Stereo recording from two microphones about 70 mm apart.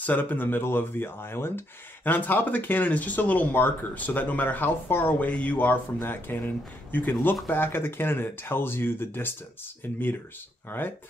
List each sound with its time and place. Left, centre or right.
0.0 s speech: left
10.7 s speech: left